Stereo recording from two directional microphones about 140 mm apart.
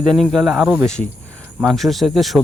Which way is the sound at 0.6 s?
15° right (ahead or behind).